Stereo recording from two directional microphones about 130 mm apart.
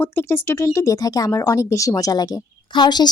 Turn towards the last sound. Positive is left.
turn(degrees=35)  # may be behind; listen again after turning